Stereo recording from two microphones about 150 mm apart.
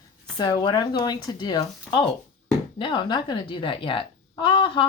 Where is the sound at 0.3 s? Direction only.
30° left (ahead or behind).